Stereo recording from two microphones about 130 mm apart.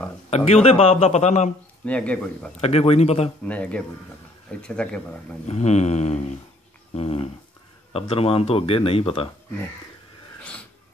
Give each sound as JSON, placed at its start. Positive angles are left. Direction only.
{"t": 0.3, "sound": "speech", "side_deg": 55}
{"t": 1.9, "sound": "a man's voice", "side_deg": 10}
{"t": 2.6, "sound": "speech", "side_deg": 50}
{"t": 3.4, "sound": "a man's voice", "side_deg": 10}
{"t": 5.5, "sound": "a sound", "side_deg": 60}
{"t": 6.9, "sound": "a sound", "side_deg": 50}
{"t": 7.9, "sound": "speech", "side_deg": 45}